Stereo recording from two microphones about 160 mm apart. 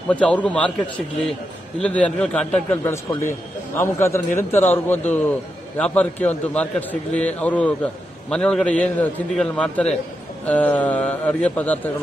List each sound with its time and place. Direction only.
0.1 s a man's voice: 10° left (ahead or behind)